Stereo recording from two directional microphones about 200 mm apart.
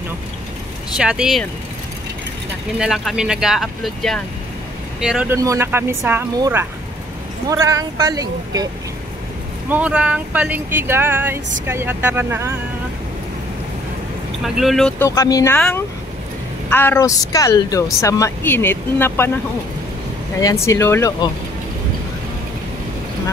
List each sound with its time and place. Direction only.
0.9 s speech: 5° right (ahead or behind)
2.8 s speech: 5° right (ahead or behind)
5.3 s speech: 15° right (ahead or behind)
9.7 s speech: 5° right (ahead or behind)
14.4 s speech: centre (ahead or behind)
15.0 s speech: 15° left (ahead or behind)
20.3 s speech: 15° left (ahead or behind)